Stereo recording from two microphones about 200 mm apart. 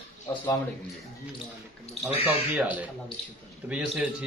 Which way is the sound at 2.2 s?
10° right (ahead or behind).